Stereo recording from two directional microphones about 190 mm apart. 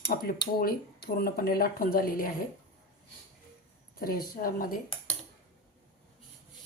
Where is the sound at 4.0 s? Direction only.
50° left (ahead or behind).